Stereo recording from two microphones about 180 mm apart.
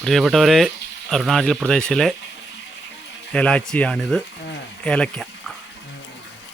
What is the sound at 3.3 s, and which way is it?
Speech, 5° left (ahead or behind).